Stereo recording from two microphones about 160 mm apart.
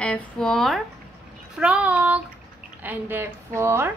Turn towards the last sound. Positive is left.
turn(degrees=-15)  # may be behind; listen again after turning